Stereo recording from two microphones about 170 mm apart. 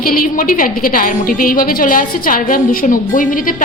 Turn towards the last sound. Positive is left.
turn(degrees=55)  # may be behind; listen again after turning